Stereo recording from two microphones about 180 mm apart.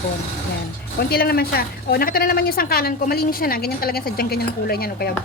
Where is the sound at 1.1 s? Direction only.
60° left (ahead or behind).